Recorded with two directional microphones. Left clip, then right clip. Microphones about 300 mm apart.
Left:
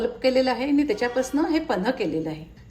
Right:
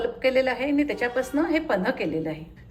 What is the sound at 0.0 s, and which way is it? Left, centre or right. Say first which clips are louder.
A woman's voice: left 1 dB; centre.